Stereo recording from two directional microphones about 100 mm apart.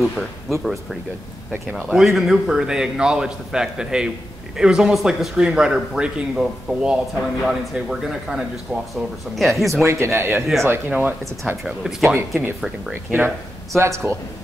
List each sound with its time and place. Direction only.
1.8 s speech: centre (ahead or behind)
9.8 s speech: 30° right (ahead or behind)
11.6 s speech: centre (ahead or behind)
13.7 s speech: 25° right (ahead or behind)